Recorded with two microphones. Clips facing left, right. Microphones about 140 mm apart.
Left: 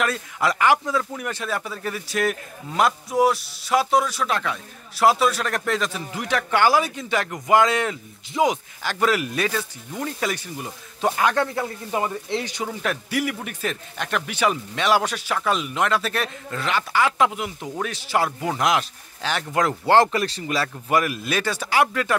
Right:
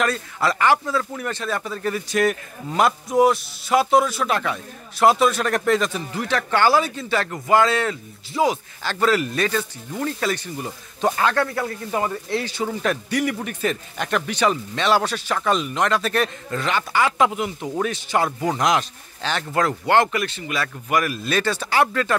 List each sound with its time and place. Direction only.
0.0 s speech: 10° left (ahead or behind)
6.1 s a man's voice: 10° left (ahead or behind)
12.6 s a man's voice: centre (ahead or behind)
19.9 s a man's voice: 30° left (ahead or behind); by 22.1 s 10° left (ahead or behind)